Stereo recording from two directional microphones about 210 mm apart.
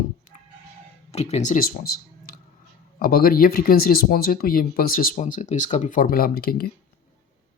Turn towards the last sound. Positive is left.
turn(degrees=45)  # may be behind; listen again after turning